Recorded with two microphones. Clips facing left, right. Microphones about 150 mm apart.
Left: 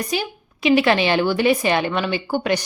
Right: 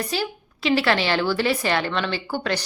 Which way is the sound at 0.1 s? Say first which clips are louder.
Left 2 dB; 15° left (ahead or behind).